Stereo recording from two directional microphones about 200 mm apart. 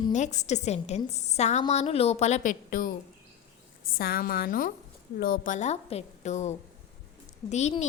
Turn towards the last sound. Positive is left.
turn(degrees=35)  # may be behind; listen again after turning